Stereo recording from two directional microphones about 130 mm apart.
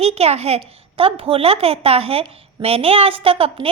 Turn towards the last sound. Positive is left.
turn(degrees=-45)  # may be behind; listen again after turning